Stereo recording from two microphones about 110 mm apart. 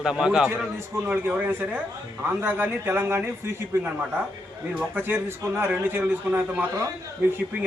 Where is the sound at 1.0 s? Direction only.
20° right (ahead or behind).